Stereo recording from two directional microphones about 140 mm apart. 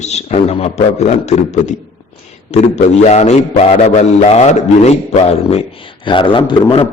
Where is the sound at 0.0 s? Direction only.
50° left (ahead or behind).